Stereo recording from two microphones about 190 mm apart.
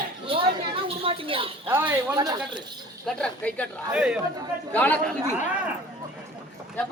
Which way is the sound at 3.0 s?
5° left (ahead or behind).